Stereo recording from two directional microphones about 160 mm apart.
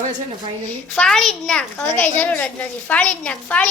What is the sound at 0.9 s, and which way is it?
A woman's voice, 5° left (ahead or behind).